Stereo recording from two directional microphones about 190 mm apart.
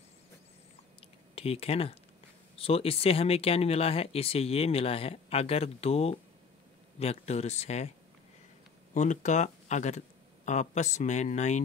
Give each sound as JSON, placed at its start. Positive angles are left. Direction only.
{"t": 1.3, "sound": "speech", "side_deg": 30}
{"t": 8.9, "sound": "speech", "side_deg": 40}